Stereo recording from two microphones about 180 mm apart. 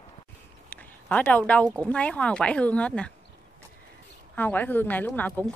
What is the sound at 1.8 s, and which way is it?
A woman's voice, 5° left (ahead or behind).